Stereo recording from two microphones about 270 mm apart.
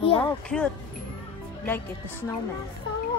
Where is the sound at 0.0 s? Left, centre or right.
Centre.